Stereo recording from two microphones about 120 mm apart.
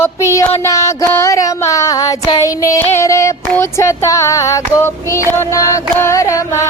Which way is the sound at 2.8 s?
25° left (ahead or behind).